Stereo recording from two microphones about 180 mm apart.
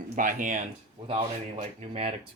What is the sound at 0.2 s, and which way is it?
Speech, 45° right (ahead or behind).